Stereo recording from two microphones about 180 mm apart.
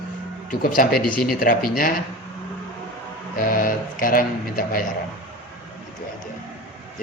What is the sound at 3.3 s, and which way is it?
Speech, 50° left (ahead or behind).